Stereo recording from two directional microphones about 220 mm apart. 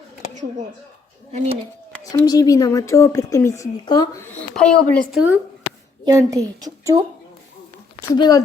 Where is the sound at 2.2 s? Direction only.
15° left (ahead or behind).